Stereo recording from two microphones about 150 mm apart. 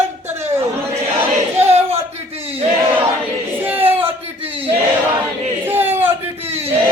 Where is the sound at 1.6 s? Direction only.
45° right (ahead or behind).